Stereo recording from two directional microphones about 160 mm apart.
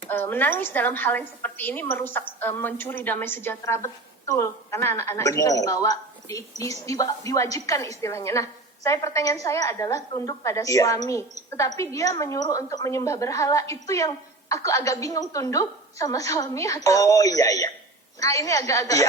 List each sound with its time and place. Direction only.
0.1 s a woman's voice: 10° left (ahead or behind)